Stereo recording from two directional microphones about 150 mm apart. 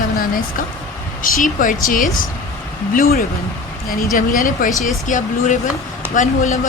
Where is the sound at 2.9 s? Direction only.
90° left.